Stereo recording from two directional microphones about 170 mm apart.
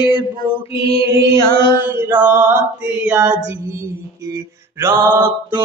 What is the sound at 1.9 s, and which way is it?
Mantra, 10° right (ahead or behind).